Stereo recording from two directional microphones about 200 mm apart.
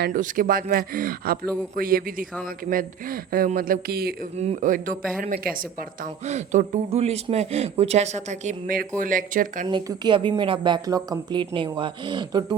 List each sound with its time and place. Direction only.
0.0 s speech: 45° right (ahead or behind)
4.4 s speech: 35° right (ahead or behind)
6.2 s speech: 35° right (ahead or behind)
9.6 s a woman's voice: 25° right (ahead or behind)